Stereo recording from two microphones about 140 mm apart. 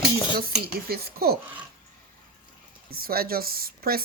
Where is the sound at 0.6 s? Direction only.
90° right.